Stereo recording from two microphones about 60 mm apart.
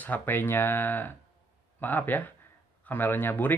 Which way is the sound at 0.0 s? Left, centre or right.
Left.